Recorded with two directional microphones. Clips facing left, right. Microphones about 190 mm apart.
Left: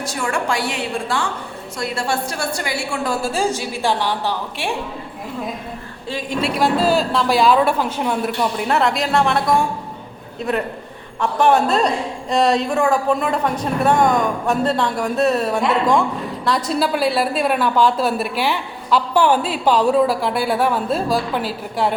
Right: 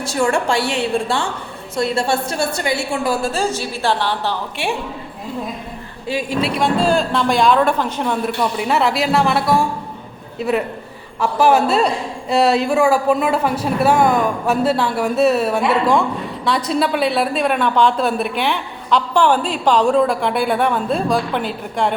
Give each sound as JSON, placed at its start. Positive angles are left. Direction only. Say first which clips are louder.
{"t": 0.0, "sound": "a woman's voice", "louder": "right 5 dB", "side_deg": -30}
{"t": 3.2, "sound": "speech", "louder": "even", "side_deg": 10}
{"t": 6.4, "sound": "a woman's voice", "louder": "left 1 dB", "side_deg": 5}
{"t": 11.2, "sound": "a woman's voice", "louder": "right 1 dB", "side_deg": -5}